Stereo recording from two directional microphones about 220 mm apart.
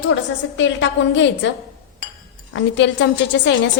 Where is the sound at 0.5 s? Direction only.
55° left (ahead or behind).